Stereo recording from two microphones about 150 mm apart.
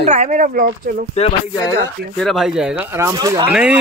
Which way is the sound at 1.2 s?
45° left (ahead or behind).